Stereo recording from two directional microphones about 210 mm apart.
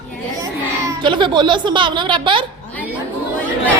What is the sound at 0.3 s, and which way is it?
A child's voice, 15° right (ahead or behind).